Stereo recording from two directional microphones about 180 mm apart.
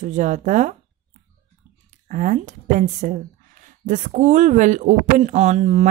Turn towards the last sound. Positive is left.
turn(degrees=-40)  # may be behind; listen again after turning